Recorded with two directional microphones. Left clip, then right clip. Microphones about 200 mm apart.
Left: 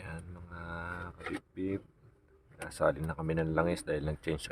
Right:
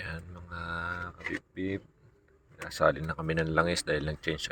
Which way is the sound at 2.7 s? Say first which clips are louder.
Right 4 dB; centre (ahead or behind).